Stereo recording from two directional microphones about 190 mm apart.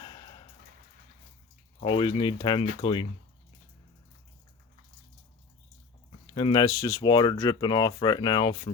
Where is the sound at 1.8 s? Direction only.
25° left (ahead or behind).